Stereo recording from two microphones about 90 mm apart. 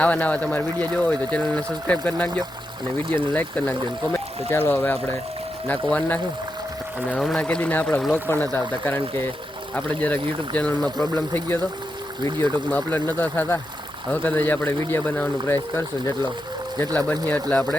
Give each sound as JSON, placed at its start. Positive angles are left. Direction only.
{"t": 0.0, "sound": "speech", "side_deg": 15}
{"t": 4.1, "sound": "speech", "side_deg": 25}
{"t": 7.2, "sound": "speech", "side_deg": 0}
{"t": 7.4, "sound": "speech", "side_deg": 15}
{"t": 12.7, "sound": "speech", "side_deg": 20}
{"t": 16.7, "sound": "speech", "side_deg": 15}